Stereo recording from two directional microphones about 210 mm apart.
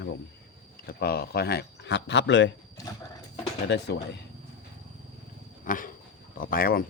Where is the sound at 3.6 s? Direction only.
55° left (ahead or behind).